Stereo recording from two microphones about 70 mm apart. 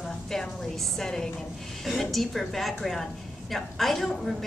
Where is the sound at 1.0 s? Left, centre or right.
Centre.